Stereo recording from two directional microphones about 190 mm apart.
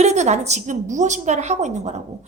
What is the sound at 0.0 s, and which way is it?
A woman's voice, 35° right (ahead or behind).